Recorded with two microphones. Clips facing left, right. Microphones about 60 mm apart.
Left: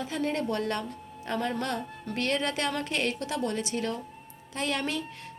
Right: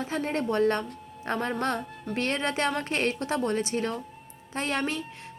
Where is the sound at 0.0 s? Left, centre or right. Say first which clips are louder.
Right 1 dB; right.